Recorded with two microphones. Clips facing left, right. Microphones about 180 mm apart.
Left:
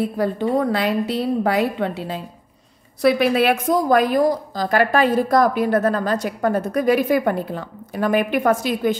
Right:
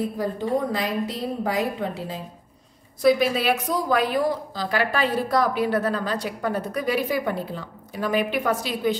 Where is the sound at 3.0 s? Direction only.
60° left (ahead or behind).